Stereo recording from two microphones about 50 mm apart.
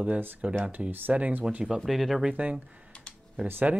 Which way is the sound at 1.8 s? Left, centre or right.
Centre.